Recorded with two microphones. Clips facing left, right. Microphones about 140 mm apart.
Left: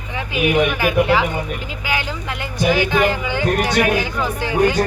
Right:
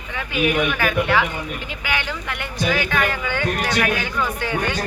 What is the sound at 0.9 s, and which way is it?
Speech, 30° left (ahead or behind).